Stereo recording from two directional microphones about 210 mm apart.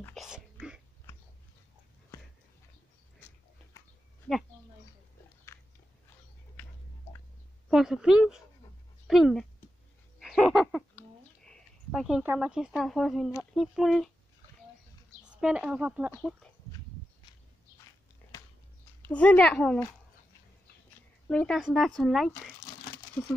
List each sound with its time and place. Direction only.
0.0 s a sound: centre (ahead or behind)
3.2 s a sound: 10° left (ahead or behind)
5.5 s biting: 10° left (ahead or behind)
7.7 s speech: centre (ahead or behind)
10.1 s a sound: centre (ahead or behind)
13.4 s speech: centre (ahead or behind)
15.4 s speech: 5° right (ahead or behind)
16.1 s speech: 5° left (ahead or behind)
19.0 s speech: 5° left (ahead or behind)
21.3 s speech: 5° left (ahead or behind)
22.6 s crumpling: 15° left (ahead or behind)